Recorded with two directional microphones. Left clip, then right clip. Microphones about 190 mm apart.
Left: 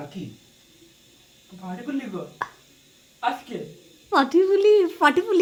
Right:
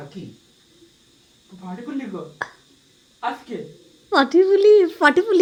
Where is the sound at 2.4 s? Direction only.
10° right (ahead or behind).